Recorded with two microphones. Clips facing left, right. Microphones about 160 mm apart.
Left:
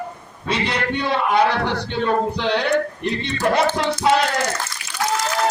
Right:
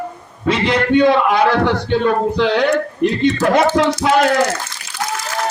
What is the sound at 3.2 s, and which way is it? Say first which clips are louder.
A man's voice: right 5 dB; 90° right.